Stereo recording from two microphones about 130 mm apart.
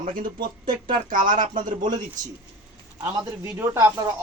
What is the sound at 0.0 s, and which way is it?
Speech, 90° right.